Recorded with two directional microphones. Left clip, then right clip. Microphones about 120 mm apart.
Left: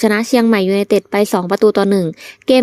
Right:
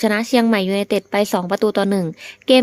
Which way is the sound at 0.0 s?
40° left (ahead or behind).